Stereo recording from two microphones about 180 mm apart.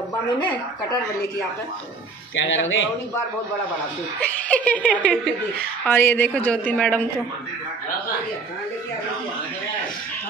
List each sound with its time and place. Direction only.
2.3 s speech: 90° left
4.2 s speech: 10° left (ahead or behind)